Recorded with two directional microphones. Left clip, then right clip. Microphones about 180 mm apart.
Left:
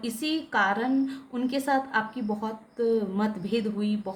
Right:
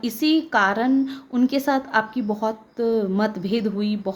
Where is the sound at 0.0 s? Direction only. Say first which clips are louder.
Right 9 dB; 45° right (ahead or behind).